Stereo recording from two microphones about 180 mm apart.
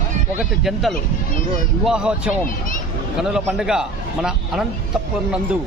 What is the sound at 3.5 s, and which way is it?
A man's voice, 5° right (ahead or behind).